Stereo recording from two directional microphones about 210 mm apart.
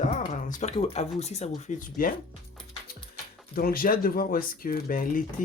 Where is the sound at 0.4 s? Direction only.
40° left (ahead or behind).